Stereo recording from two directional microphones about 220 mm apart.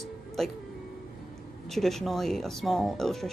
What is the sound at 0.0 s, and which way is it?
Music, centre (ahead or behind).